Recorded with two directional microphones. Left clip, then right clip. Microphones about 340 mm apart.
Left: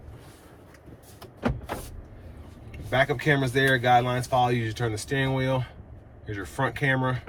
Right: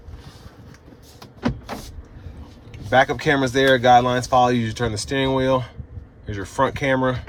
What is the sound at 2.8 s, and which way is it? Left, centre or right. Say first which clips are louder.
Speech: right 6 dB; centre.